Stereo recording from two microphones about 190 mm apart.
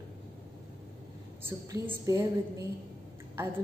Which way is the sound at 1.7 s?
15° right (ahead or behind).